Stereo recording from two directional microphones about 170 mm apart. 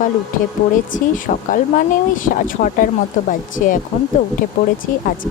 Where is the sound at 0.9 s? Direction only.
50° left (ahead or behind).